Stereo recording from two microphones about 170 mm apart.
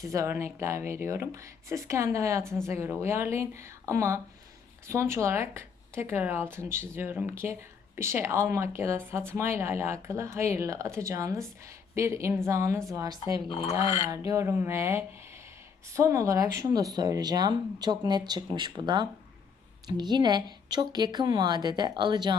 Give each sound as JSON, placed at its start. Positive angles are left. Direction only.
{"t": 0.0, "sound": "speech", "side_deg": -20}